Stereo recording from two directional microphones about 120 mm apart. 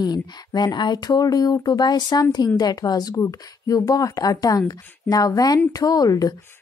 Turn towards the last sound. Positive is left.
turn(degrees=30)  # may be behind; listen again after turning